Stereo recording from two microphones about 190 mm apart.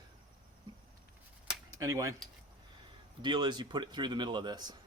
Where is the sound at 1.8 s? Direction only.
15° right (ahead or behind).